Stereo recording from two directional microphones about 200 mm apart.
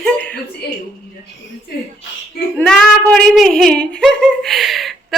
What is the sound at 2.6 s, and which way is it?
Female singing, 5° left (ahead or behind).